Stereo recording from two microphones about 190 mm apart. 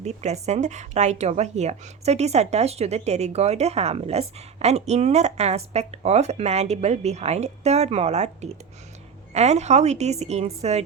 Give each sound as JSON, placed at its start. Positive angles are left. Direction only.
{"t": 0.0, "sound": "speech", "side_deg": -35}